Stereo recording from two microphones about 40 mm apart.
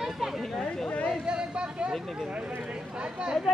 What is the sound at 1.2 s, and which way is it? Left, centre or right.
Speech, right.